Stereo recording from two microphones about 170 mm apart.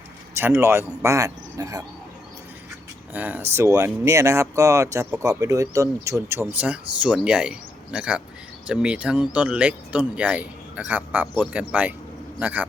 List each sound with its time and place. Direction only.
0.3 s speech: 15° right (ahead or behind)
3.1 s speech: 10° right (ahead or behind)